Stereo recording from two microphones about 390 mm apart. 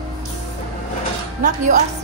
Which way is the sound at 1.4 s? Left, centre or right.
Centre.